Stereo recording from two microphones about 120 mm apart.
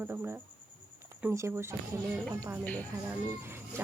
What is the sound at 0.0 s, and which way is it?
Speech, 20° right (ahead or behind).